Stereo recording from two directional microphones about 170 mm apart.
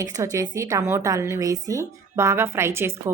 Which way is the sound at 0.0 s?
20° right (ahead or behind).